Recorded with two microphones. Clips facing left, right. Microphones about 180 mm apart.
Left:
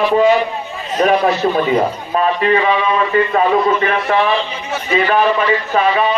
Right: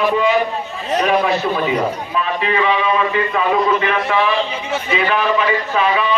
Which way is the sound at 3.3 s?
45° left (ahead or behind).